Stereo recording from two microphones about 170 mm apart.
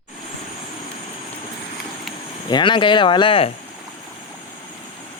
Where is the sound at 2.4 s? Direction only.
25° left (ahead or behind).